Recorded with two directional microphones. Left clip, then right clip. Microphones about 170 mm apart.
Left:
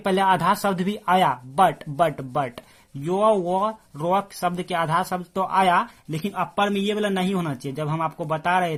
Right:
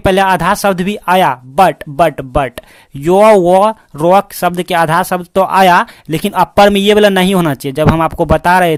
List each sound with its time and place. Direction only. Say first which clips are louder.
0.0 s speech: right 10 dB; 35° right (ahead or behind)